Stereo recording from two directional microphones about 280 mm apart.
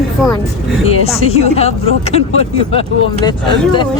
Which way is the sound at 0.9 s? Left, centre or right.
Left.